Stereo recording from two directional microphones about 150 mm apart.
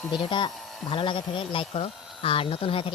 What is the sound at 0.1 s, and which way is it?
Speech, 30° left (ahead or behind).